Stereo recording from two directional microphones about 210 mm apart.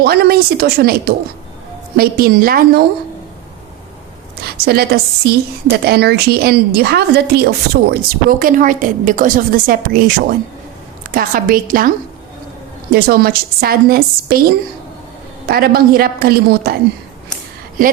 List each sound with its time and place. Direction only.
0.0 s a woman's voice: 45° right (ahead or behind)
4.6 s a woman's voice: 50° right (ahead or behind)
11.1 s a woman's voice: 45° right (ahead or behind)
15.4 s a woman's voice: 45° right (ahead or behind)